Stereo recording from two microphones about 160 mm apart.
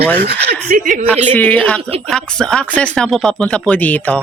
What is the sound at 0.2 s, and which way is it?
Speech, 65° right (ahead or behind).